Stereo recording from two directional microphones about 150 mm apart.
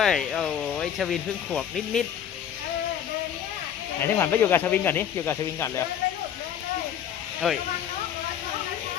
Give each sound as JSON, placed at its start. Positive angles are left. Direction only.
{"t": 0.0, "sound": "speech", "side_deg": 0}
{"t": 4.0, "sound": "speech", "side_deg": 15}
{"t": 7.4, "sound": "speech", "side_deg": 0}